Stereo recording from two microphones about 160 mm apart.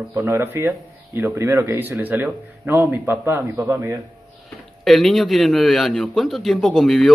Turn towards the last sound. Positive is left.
turn(degrees=0)  # may be behind; listen again after turning